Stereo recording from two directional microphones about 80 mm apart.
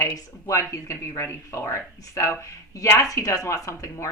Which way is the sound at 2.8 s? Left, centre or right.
Left.